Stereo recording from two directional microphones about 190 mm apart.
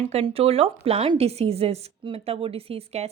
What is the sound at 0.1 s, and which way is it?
Speech, 30° right (ahead or behind).